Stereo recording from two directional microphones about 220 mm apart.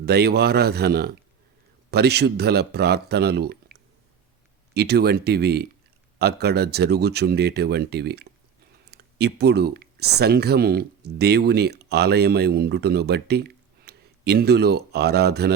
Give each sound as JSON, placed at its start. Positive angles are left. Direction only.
{"t": 0.0, "sound": "speech", "side_deg": -45}